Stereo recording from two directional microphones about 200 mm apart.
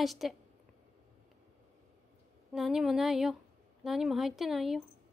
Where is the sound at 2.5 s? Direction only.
Centre (ahead or behind).